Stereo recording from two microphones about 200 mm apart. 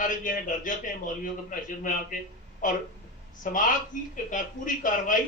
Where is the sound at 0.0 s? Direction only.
40° left (ahead or behind).